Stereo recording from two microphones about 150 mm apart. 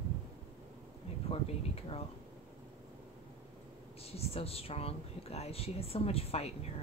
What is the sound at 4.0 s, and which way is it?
Speech, 40° left (ahead or behind).